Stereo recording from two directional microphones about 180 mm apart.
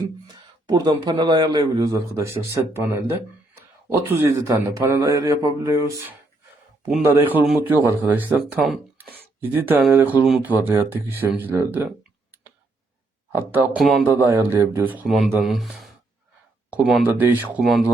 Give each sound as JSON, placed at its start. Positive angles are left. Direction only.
{"t": 0.7, "sound": "a man's voice", "side_deg": -25}
{"t": 7.2, "sound": "a man's voice", "side_deg": -10}
{"t": 13.5, "sound": "a man's voice", "side_deg": -10}
{"t": 13.8, "sound": "speech", "side_deg": 0}
{"t": 14.1, "sound": "a man's voice", "side_deg": -15}